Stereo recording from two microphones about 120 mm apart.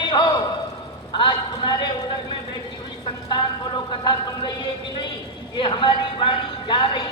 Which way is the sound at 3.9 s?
40° left (ahead or behind).